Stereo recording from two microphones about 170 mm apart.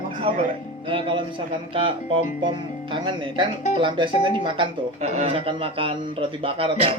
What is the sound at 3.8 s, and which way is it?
Speech, 30° right (ahead or behind).